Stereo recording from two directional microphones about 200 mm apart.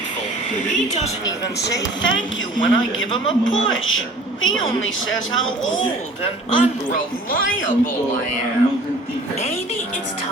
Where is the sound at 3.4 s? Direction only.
75° left (ahead or behind).